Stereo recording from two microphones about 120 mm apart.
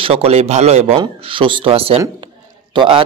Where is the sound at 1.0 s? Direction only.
45° right (ahead or behind).